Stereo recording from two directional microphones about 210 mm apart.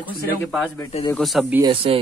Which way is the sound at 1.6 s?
25° right (ahead or behind).